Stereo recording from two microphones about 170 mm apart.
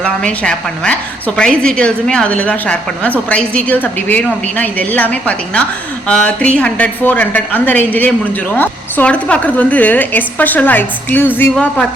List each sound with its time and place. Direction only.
0.0 s a woman's voice: 5° left (ahead or behind)